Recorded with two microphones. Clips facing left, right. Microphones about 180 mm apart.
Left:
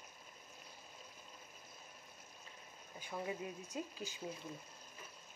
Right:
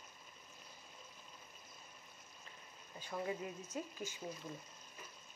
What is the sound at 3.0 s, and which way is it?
Speech, 15° left (ahead or behind).